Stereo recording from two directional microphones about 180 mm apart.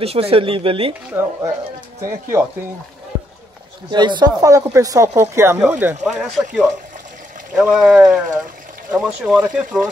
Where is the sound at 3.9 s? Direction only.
25° right (ahead or behind); by 6.4 s 5° right (ahead or behind).